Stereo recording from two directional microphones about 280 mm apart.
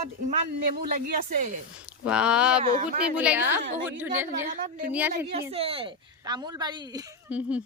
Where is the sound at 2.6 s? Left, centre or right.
Right.